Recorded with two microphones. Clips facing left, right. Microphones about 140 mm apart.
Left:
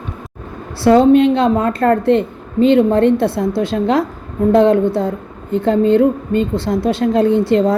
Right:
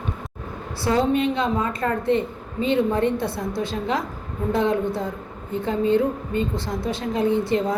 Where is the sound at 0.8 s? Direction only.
80° left.